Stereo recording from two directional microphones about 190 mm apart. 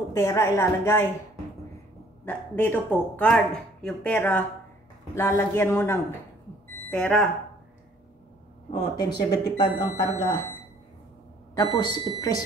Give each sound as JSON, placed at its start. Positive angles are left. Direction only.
{"t": 0.1, "sound": "speech", "side_deg": 15}
{"t": 8.6, "sound": "speech", "side_deg": 25}
{"t": 11.5, "sound": "speech", "side_deg": 20}